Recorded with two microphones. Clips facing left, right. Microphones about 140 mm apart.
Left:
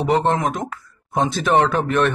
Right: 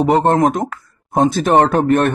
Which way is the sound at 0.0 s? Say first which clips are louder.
Right 5 dB; 50° right (ahead or behind).